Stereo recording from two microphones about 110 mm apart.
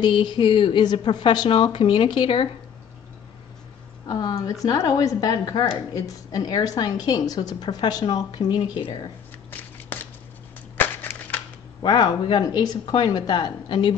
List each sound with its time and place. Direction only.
0.0 s a woman's voice: 45° left (ahead or behind)
4.1 s a woman's voice: 35° left (ahead or behind)
9.5 s shuffling cards: 15° left (ahead or behind)
11.0 s a sound: 15° left (ahead or behind)
11.8 s a woman's voice: 40° left (ahead or behind)